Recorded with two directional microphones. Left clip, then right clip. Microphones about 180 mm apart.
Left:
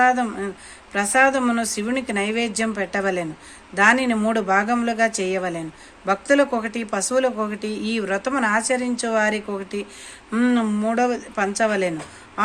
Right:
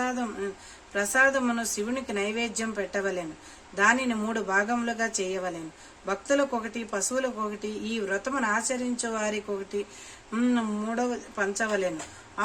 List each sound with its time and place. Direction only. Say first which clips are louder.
0.0 s speech: left 12 dB; 15° left (ahead or behind)